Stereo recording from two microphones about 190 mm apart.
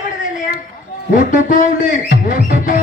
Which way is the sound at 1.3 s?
40° left (ahead or behind).